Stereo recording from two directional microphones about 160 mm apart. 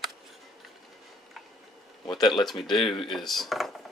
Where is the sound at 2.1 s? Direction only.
25° left (ahead or behind).